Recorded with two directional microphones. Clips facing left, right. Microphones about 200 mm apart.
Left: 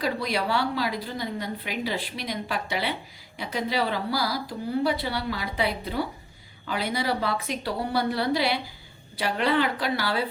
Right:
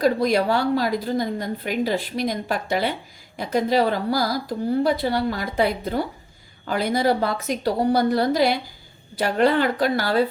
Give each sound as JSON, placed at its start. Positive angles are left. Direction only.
{"t": 0.0, "sound": "a woman's voice", "side_deg": -45}